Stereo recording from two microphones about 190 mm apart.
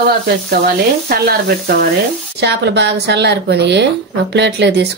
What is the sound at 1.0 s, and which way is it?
Speech, 55° right (ahead or behind).